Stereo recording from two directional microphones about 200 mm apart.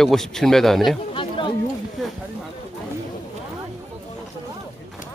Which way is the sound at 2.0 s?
Centre (ahead or behind).